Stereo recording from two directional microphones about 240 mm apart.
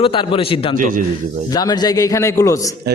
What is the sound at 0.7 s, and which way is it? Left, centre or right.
Speech, right.